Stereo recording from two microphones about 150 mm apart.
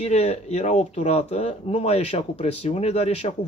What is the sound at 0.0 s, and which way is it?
Speech, 45° left (ahead or behind).